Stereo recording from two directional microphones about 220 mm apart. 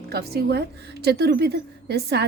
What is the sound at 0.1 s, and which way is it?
A woman's voice, 45° right (ahead or behind).